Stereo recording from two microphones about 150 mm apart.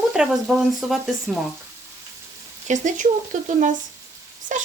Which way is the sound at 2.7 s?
55° right (ahead or behind).